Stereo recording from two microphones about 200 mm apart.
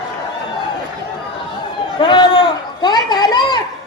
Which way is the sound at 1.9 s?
25° left (ahead or behind).